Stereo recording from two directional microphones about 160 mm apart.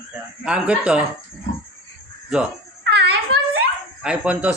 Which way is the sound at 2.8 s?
90° right.